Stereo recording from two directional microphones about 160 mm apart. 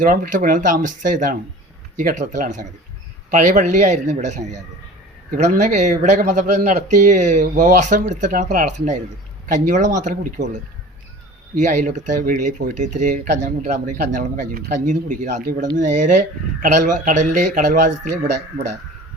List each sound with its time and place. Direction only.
0.0 s speech: 60° right (ahead or behind)
13.2 s speech: 90° right
13.8 s speech: 55° right (ahead or behind)